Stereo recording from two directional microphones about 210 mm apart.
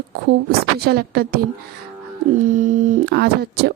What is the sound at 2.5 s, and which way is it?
Speech, 40° right (ahead or behind).